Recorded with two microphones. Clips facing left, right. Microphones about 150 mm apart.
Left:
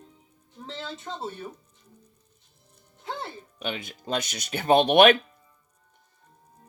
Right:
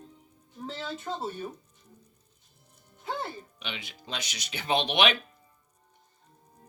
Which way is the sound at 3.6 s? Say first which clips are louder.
Left 7 dB; 45° left (ahead or behind).